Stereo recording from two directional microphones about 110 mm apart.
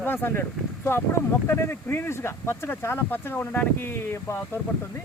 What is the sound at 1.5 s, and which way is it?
Speech, 20° left (ahead or behind).